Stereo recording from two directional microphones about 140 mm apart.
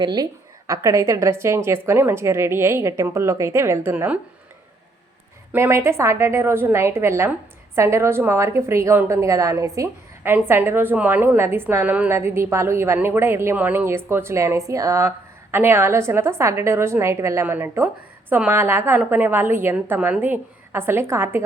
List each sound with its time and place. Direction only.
0.0 s a woman's voice: 30° right (ahead or behind); by 4.2 s 15° right (ahead or behind)
5.5 s a woman's voice: 20° right (ahead or behind)